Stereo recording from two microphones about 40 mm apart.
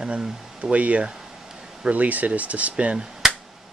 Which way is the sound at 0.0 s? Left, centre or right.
Right.